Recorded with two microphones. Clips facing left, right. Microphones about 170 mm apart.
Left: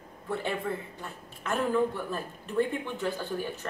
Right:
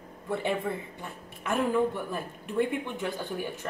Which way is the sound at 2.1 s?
15° right (ahead or behind).